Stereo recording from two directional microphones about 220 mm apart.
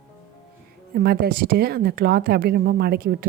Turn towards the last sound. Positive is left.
turn(degrees=-45)  # may be behind; listen again after turning